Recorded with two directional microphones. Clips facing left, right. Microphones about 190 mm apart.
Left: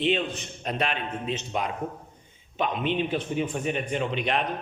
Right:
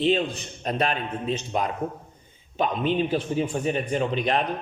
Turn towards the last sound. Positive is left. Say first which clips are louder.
# right 3 dB
turn(degrees=-40)  # may be behind; listen again after turning